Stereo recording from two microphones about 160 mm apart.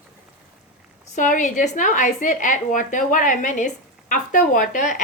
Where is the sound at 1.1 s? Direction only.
55° left (ahead or behind).